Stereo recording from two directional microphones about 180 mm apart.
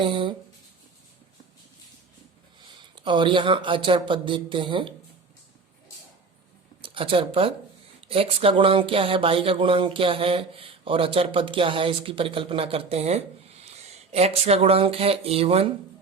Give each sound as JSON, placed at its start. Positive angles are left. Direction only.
{"t": 0.0, "sound": "speech", "side_deg": -30}
{"t": 2.9, "sound": "speech", "side_deg": -25}
{"t": 6.8, "sound": "speech", "side_deg": -30}